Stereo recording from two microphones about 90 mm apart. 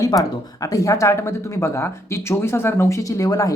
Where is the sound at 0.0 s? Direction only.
40° left (ahead or behind).